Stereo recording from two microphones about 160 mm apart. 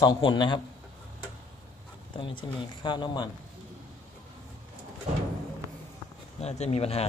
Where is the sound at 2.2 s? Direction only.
30° left (ahead or behind).